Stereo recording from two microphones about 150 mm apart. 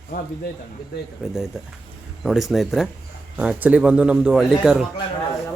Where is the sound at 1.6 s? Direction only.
5° right (ahead or behind).